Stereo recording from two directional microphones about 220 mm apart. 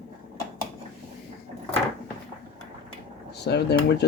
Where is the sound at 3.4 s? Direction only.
50° left (ahead or behind).